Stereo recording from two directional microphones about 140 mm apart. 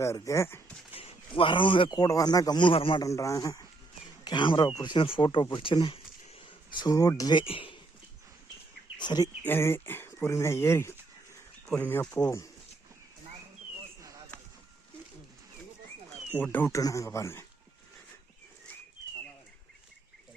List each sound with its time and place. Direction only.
0.0 s speech: 20° left (ahead or behind)
0.9 s a man's voice: 40° left (ahead or behind)
3.0 s speech: 20° left (ahead or behind); by 7.8 s 40° left (ahead or behind)
9.0 s speech: 30° left (ahead or behind)
9.4 s speech: 15° left (ahead or behind)
16.3 s speech: 10° left (ahead or behind)